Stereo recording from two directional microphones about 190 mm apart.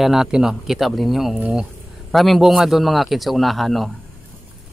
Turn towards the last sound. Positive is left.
turn(degrees=0)  # may be behind; listen again after turning